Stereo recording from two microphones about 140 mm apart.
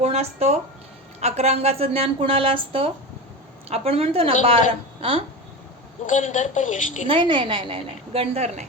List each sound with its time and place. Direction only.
0.0 s a woman's voice: 50° right (ahead or behind)
6.1 s a woman's voice: 65° left (ahead or behind)
7.1 s a woman's voice: 35° right (ahead or behind)